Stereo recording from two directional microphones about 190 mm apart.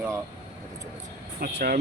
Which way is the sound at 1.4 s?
50° right (ahead or behind).